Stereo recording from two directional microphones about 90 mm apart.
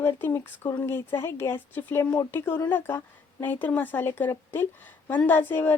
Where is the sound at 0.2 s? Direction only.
25° left (ahead or behind).